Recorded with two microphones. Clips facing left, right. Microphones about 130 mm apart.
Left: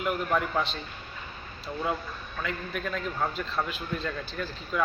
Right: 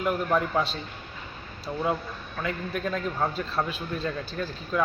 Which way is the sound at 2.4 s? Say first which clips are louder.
Right 3 dB; 25° right (ahead or behind).